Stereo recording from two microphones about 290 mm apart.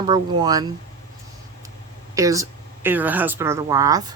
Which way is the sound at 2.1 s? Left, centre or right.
Centre.